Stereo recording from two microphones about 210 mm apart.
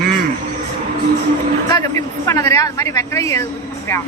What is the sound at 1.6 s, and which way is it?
A man's voice, 15° left (ahead or behind).